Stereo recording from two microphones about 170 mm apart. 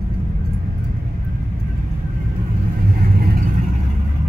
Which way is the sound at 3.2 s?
60° right (ahead or behind).